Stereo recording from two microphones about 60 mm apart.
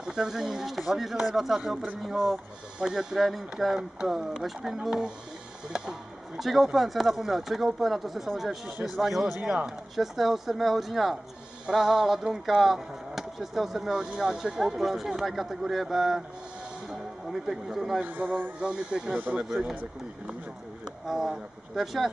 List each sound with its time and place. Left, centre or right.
0.0 s speech: centre
9.4 s speech: centre
9.9 s speech: centre
17.3 s speech: centre
18.0 s speech: right
18.6 s speech: centre
19.1 s speech: right
21.1 s speech: centre